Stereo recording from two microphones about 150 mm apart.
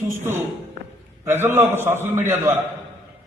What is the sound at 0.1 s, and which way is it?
A man's voice, 15° right (ahead or behind).